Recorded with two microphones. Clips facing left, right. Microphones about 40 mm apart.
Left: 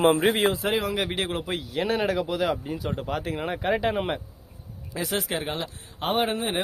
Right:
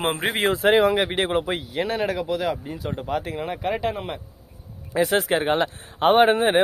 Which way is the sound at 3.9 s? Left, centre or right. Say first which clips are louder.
Left 4 dB; left.